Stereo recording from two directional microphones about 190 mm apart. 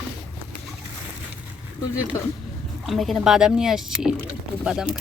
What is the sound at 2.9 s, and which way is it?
Speech, centre (ahead or behind).